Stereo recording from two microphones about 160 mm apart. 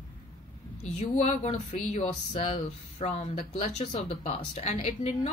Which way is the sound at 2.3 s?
35° left (ahead or behind).